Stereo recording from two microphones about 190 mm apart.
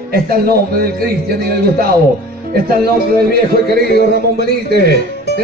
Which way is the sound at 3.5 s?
55° right (ahead or behind).